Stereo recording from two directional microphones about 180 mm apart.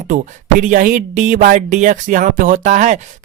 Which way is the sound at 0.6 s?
45° right (ahead or behind).